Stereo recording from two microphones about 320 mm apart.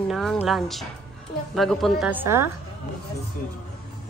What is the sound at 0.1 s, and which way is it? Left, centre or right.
A child's voice, centre.